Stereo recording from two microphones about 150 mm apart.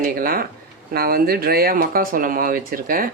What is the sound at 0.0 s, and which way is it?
Speech, 70° right (ahead or behind).